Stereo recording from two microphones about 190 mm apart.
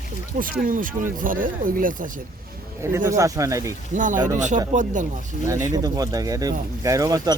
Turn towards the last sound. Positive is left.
turn(degrees=-20)  # may be behind; listen again after turning